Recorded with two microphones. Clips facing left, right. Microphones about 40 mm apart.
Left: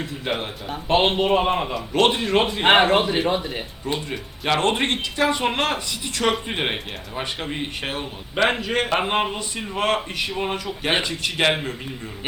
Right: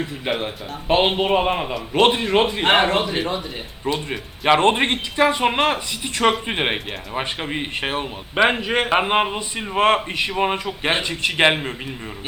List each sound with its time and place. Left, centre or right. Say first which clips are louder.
0.0 s a man's voice: right 2 dB; centre
2.9 s speech: left 2 dB; centre
3.9 s a man's voice: right 4 dB; right
9.7 s a man's voice: right 5 dB; right